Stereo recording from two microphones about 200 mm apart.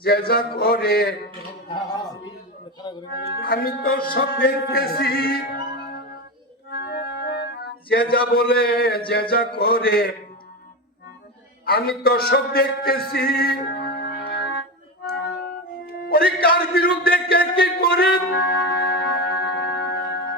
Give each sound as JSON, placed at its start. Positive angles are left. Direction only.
{"t": 0.0, "sound": "music", "side_deg": 50}
{"t": 3.4, "sound": "music", "side_deg": 50}
{"t": 6.7, "sound": "music", "side_deg": 55}
{"t": 11.6, "sound": "a man's voice", "side_deg": 50}
{"t": 15.0, "sound": "music", "side_deg": 50}